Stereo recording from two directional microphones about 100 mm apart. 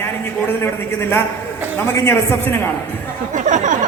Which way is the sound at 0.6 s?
20° left (ahead or behind).